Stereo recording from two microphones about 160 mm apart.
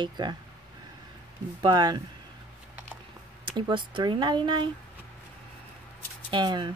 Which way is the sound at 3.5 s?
30° right (ahead or behind).